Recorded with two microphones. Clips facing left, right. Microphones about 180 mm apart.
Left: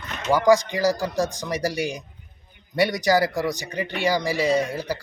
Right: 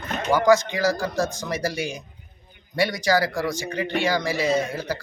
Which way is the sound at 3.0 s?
20° left (ahead or behind).